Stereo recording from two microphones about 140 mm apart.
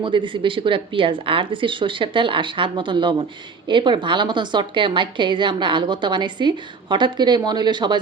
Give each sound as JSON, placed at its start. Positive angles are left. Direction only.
{"t": 0.0, "sound": "speech", "side_deg": -35}